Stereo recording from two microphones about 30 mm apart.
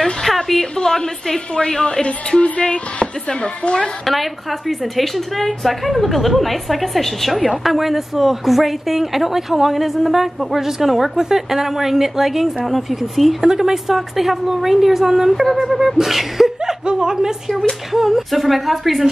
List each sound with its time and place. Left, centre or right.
0.0 s a sound: centre
0.7 s a woman's voice: centre
1.9 s speech: left
4.0 s a woman's voice: centre
13.4 s a woman's voice: centre
16.8 s speech: right
17.9 s a woman's voice: centre